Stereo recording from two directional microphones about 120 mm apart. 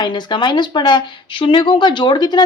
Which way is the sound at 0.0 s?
40° left (ahead or behind).